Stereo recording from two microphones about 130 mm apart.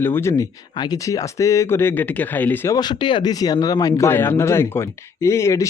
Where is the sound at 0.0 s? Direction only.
20° left (ahead or behind).